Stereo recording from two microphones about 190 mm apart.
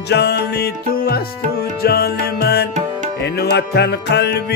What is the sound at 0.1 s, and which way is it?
Music, 60° left (ahead or behind).